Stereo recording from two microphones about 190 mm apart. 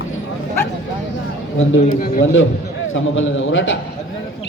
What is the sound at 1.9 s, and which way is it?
Speech, 50° left (ahead or behind).